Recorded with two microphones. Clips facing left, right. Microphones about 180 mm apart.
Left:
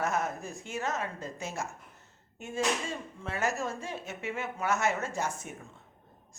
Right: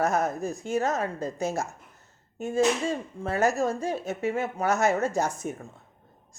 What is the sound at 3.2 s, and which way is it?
A woman's voice, 40° right (ahead or behind).